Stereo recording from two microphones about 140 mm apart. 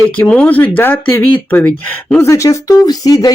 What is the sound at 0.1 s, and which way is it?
Speech, 10° left (ahead or behind).